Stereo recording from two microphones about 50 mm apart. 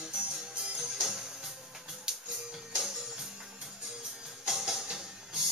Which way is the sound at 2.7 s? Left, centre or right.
Centre.